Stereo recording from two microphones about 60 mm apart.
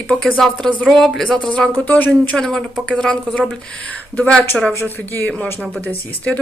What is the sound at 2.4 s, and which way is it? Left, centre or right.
Speech, centre.